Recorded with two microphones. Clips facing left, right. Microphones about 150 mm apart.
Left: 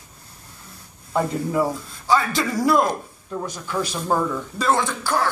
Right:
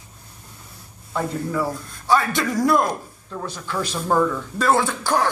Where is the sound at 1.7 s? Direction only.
Centre (ahead or behind).